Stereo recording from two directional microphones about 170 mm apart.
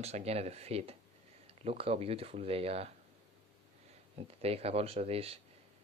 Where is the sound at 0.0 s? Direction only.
40° right (ahead or behind).